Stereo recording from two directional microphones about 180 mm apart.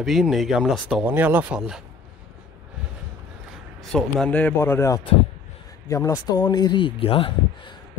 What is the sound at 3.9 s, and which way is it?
Speech, 5° left (ahead or behind).